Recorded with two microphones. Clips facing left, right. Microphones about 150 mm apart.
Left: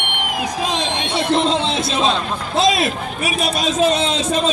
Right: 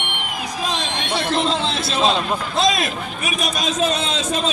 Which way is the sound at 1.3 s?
Centre (ahead or behind).